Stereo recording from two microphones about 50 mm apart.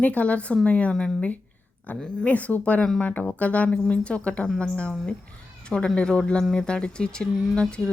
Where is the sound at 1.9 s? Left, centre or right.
Left.